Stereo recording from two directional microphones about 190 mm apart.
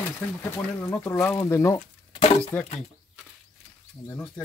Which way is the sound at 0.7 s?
10° left (ahead or behind).